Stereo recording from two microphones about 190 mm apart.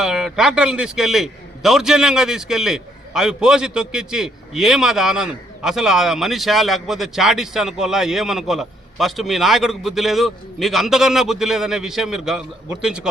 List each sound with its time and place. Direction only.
0.0 s a man's voice: centre (ahead or behind)